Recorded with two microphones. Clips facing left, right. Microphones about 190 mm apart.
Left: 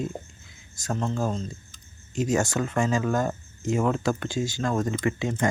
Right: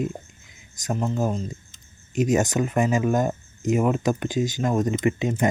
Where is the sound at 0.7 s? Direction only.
15° right (ahead or behind).